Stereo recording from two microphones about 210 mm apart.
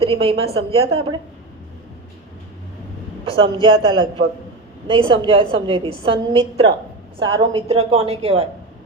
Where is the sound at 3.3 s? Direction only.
25° right (ahead or behind).